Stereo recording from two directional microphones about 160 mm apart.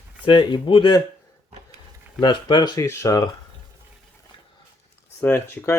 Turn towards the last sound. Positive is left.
turn(degrees=10)  # may be behind; listen again after turning